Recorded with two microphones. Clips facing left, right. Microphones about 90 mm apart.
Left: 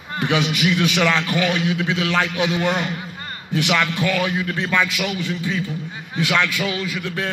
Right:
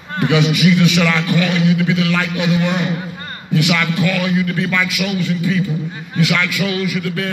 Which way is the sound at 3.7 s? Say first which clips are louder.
Left 1 dB; 30° left (ahead or behind).